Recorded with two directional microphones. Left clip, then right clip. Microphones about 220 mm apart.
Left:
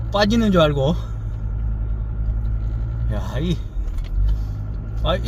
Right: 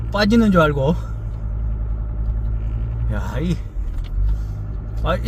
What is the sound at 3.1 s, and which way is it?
Speech, 15° right (ahead or behind).